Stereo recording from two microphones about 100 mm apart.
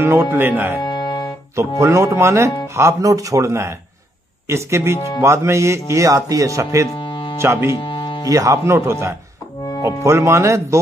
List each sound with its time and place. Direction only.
0.0 s speech: 25° right (ahead or behind)
0.8 s music: 45° left (ahead or behind)
1.8 s speech: 30° right (ahead or behind)
7.0 s music: 55° left (ahead or behind)
7.3 s speech: 30° right (ahead or behind)
7.8 s music: 50° left (ahead or behind)
8.3 s speech: 35° right (ahead or behind)